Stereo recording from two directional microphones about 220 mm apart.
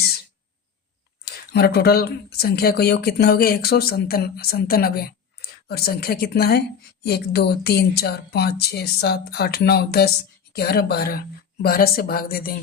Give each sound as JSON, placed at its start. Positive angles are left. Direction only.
{"t": 1.2, "sound": "speech", "side_deg": 45}